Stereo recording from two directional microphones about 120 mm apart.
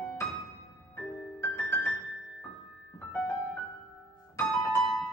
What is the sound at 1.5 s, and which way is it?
Music, 15° left (ahead or behind).